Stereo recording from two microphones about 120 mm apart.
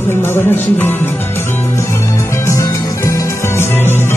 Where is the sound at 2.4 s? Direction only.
25° left (ahead or behind).